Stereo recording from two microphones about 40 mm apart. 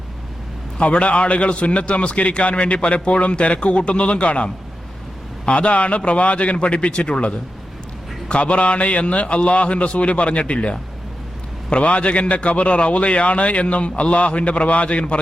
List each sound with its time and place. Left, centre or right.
0.8 s a man's voice: left